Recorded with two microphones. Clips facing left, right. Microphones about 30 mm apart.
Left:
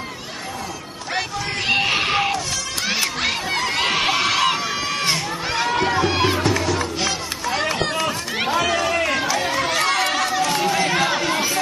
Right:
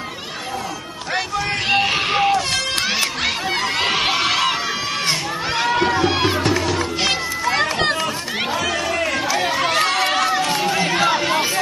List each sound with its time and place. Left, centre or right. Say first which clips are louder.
1.7 s music: even; centre
2.9 s a sound: right 1 dB; centre
5.0 s music: right 1 dB; centre
8.0 s run: even; centre
9.3 s run: right 2 dB; centre
10.0 s run: right 2 dB; right
10.5 s run: even; centre
11.0 s a sound: right 2 dB; centre